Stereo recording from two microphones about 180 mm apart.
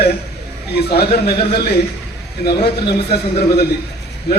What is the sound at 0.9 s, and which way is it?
A man's voice, 60° left (ahead or behind).